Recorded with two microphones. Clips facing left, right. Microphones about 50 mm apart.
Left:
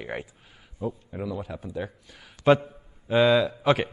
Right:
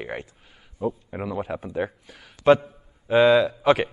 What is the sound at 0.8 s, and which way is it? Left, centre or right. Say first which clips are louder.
Speech: right 4 dB; centre.